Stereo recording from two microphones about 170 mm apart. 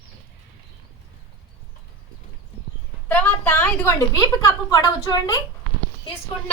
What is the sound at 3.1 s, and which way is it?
A woman's voice, 10° left (ahead or behind).